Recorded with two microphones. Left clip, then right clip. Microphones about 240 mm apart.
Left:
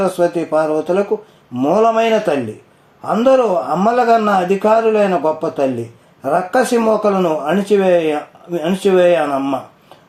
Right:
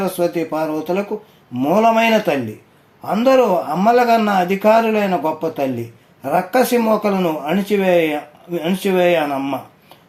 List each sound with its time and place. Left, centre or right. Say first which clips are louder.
0.0 s speech: left 3 dB; right